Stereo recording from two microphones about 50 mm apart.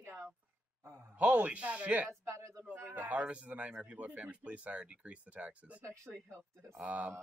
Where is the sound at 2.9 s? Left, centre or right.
Right.